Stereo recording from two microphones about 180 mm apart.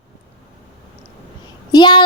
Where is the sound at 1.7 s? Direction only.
25° left (ahead or behind).